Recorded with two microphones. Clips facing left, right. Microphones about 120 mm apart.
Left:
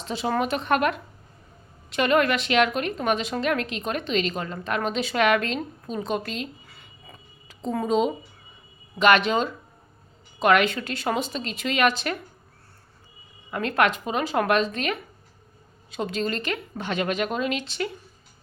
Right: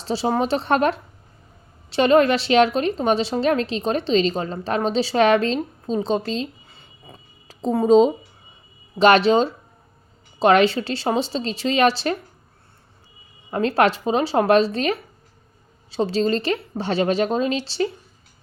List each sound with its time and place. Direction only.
0.0 s a woman's voice: 35° right (ahead or behind)
5.9 s a sound: 30° right (ahead or behind)
7.4 s a woman's voice: 35° right (ahead or behind)
13.5 s a woman's voice: 30° right (ahead or behind)